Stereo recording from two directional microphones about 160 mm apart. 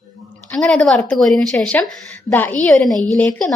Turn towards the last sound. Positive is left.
turn(degrees=10)  # may be behind; listen again after turning